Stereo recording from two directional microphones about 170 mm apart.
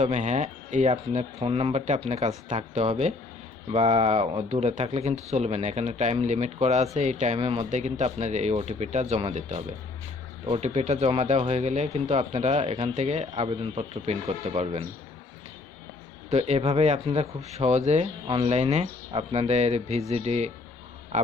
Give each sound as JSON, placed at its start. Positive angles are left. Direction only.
{"t": 0.0, "sound": "speech", "side_deg": -45}
{"t": 16.3, "sound": "speech", "side_deg": -35}
{"t": 18.3, "sound": "speech", "side_deg": -30}
{"t": 18.5, "sound": "speech", "side_deg": -40}